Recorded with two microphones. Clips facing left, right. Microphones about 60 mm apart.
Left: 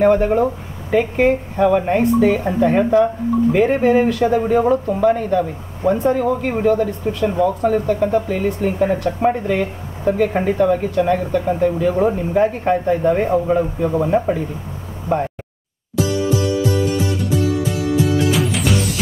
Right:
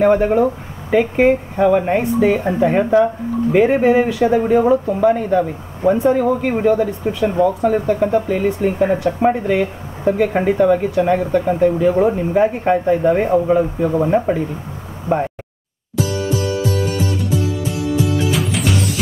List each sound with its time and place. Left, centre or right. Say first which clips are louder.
0.0 s speech: right 1 dB; centre
7.1 s speech: right 2 dB; centre
7.4 s speech: even; centre
18.3 s music: left 1 dB; centre